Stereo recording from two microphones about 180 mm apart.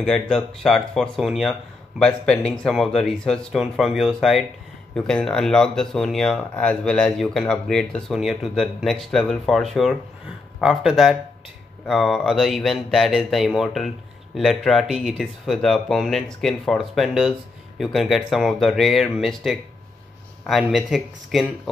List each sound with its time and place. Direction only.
0.0 s speech: 5° left (ahead or behind)